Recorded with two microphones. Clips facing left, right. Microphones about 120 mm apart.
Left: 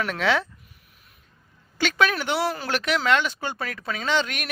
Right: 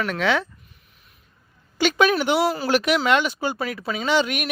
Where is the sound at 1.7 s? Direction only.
15° right (ahead or behind).